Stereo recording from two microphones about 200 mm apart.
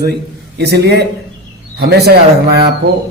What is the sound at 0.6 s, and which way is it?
A man's voice, 55° right (ahead or behind).